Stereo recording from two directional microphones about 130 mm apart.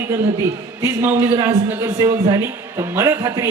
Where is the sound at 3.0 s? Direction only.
20° right (ahead or behind).